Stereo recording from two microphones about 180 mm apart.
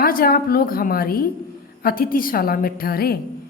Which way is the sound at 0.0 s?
55° left (ahead or behind).